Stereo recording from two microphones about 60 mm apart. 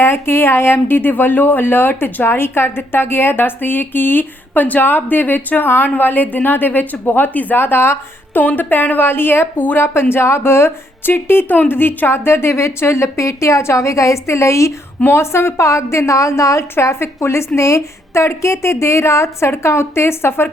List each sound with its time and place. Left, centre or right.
0.0 s a woman's voice: left
16.7 s a woman's voice: left